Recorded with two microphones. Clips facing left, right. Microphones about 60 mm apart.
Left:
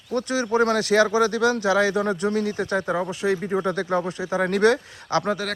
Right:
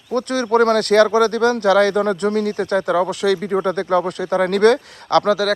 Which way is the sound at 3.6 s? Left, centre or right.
Right.